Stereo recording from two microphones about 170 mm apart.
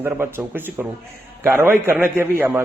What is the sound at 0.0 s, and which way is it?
Speech, 15° right (ahead or behind).